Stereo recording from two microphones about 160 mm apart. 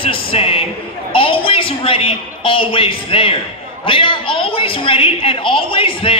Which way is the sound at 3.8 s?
35° left (ahead or behind).